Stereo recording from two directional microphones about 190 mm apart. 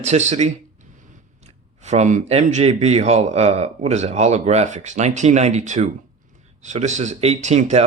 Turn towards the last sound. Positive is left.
turn(degrees=-35)  # may be behind; listen again after turning